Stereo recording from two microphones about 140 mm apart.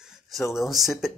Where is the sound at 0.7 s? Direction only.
Centre (ahead or behind).